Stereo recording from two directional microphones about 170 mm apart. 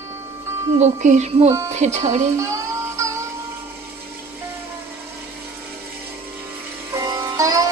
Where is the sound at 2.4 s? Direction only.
20° right (ahead or behind).